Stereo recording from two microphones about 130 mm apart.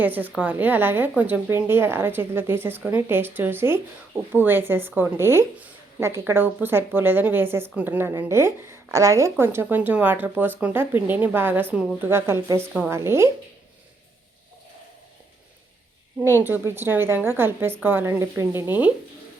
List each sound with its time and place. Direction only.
0.0 s a woman's voice: 15° right (ahead or behind)
16.2 s a woman's voice: 15° right (ahead or behind)